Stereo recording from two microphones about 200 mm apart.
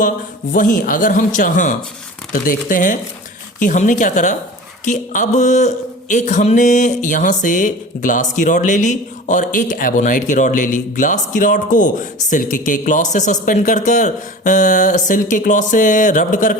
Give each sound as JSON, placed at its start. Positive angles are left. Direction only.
{"t": 0.5, "sound": "speech", "side_deg": 40}